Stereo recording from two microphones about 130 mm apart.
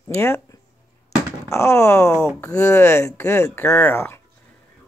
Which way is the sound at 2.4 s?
20° left (ahead or behind).